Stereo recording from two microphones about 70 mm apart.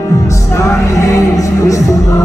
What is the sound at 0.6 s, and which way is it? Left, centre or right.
Music, left.